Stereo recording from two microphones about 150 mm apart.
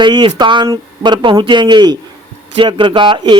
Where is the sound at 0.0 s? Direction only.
30° right (ahead or behind).